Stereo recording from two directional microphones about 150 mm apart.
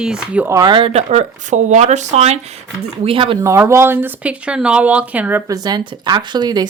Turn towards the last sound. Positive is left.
turn(degrees=-25)  # may be behind; listen again after turning